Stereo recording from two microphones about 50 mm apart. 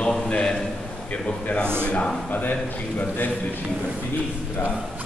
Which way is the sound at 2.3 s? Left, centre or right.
Left.